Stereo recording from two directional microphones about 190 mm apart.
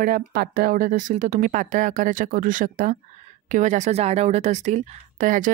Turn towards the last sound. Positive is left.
turn(degrees=-45)  # may be behind; listen again after turning